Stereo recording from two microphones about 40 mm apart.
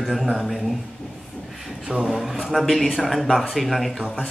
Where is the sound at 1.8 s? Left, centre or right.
Right.